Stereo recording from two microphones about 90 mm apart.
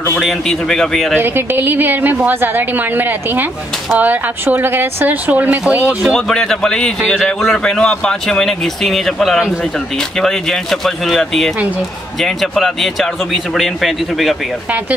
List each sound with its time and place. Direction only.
0.2 s speech: centre (ahead or behind)
1.2 s a woman's voice: 25° right (ahead or behind)
6.0 s speech: centre (ahead or behind)